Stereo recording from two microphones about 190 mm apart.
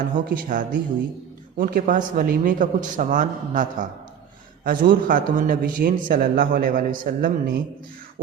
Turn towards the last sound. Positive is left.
turn(degrees=-45)  # may be behind; listen again after turning